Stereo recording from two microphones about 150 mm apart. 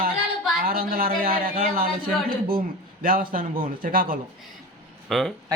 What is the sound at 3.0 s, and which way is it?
A man's voice, 70° right (ahead or behind).